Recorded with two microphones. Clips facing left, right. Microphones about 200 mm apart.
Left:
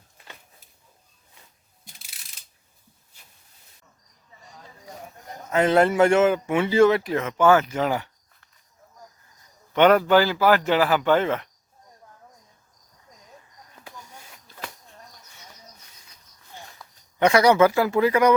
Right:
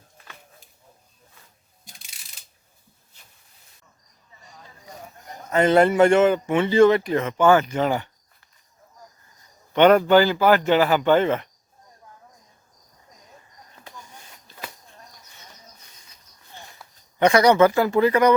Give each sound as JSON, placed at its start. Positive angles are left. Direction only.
{"t": 5.5, "sound": "speech", "side_deg": 0}
{"t": 9.7, "sound": "speech", "side_deg": 5}
{"t": 16.7, "sound": "speech", "side_deg": 0}